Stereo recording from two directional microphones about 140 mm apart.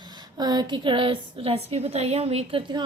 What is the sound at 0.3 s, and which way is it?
A woman's voice, 30° right (ahead or behind).